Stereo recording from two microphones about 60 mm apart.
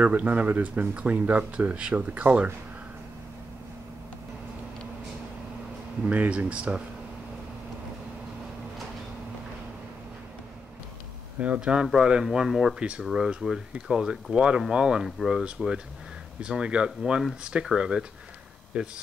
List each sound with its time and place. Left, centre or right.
0.0 s speech: right
6.0 s speech: right
11.3 s speech: right
11.6 s speech: centre
12.7 s speech: centre